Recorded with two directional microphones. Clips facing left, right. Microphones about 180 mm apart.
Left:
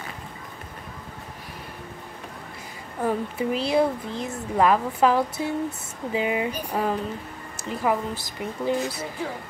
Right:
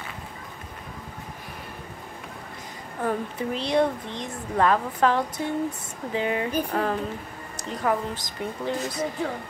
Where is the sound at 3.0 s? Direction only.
10° left (ahead or behind).